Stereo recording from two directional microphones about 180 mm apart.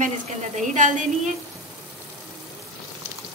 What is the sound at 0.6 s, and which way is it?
Speech, 45° right (ahead or behind).